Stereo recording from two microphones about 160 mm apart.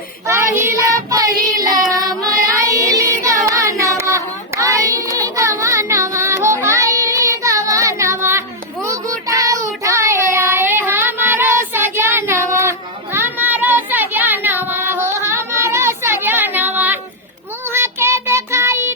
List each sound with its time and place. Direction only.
0.3 s child singing: 15° right (ahead or behind)
2.5 s carnatic music: 20° right (ahead or behind)
5.4 s child singing: 20° right (ahead or behind)